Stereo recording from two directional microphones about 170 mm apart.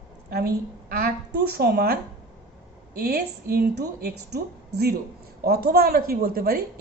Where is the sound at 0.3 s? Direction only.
65° right (ahead or behind).